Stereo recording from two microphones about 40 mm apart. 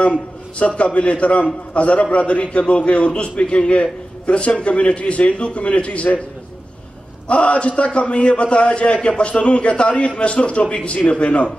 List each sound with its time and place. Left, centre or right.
0.6 s a man's voice: left
7.2 s a man's voice: left